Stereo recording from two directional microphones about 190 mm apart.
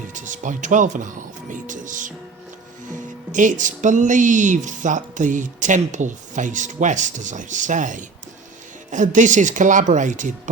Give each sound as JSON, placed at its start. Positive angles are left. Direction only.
{"t": 0.1, "sound": "speech", "side_deg": -40}
{"t": 3.3, "sound": "speech", "side_deg": -40}